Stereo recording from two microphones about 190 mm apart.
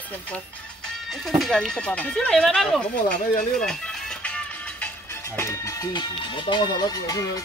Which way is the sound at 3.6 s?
5° left (ahead or behind).